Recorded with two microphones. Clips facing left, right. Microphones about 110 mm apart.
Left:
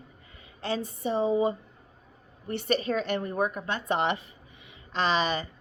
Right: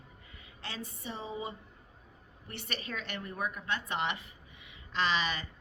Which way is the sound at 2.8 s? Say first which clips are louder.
Left 12 dB; 30° left (ahead or behind).